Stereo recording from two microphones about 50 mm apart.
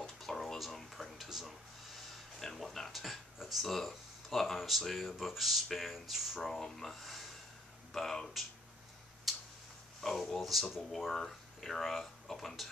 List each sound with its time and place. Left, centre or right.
0.2 s a sound: centre
3.3 s speech: centre
9.3 s tick-tock: centre
10.3 s speech: centre